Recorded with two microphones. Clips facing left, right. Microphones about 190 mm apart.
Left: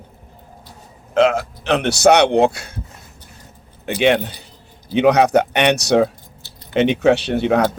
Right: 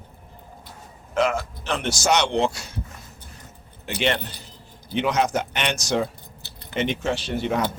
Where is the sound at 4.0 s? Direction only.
65° left (ahead or behind).